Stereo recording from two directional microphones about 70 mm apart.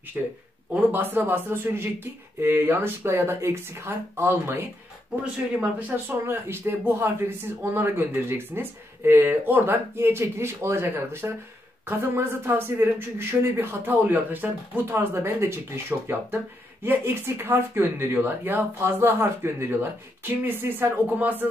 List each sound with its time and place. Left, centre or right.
0.2 s speech: right
5.2 s speech: centre
15.0 s speech: right